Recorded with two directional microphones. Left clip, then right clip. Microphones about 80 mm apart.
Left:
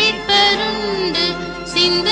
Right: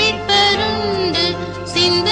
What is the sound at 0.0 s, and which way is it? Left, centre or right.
Music, left.